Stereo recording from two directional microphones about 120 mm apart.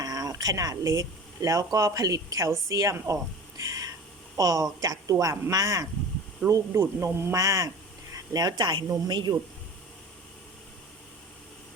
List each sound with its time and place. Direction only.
0.0 s speech: 30° right (ahead or behind)
3.6 s a sound: 30° right (ahead or behind)
4.4 s speech: 30° right (ahead or behind)